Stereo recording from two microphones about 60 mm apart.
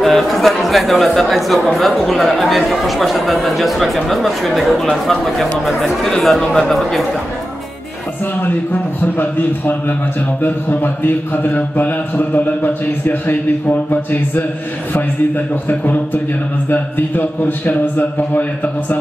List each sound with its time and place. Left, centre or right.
0.0 s speech: centre
8.4 s a man's voice: left
16.7 s a man's voice: left